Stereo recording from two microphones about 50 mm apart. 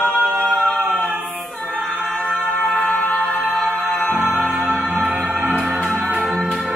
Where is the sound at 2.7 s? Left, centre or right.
Left.